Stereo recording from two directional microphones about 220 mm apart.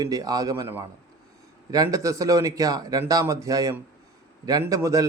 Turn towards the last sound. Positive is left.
turn(degrees=-15)  # may be behind; listen again after turning